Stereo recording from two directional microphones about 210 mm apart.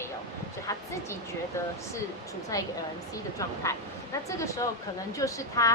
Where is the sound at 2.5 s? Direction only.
15° left (ahead or behind).